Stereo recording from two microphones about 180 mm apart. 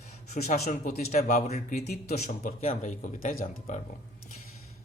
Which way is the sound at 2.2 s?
40° left (ahead or behind).